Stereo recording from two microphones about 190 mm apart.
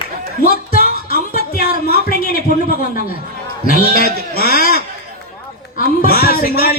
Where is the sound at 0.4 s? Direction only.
50° left (ahead or behind).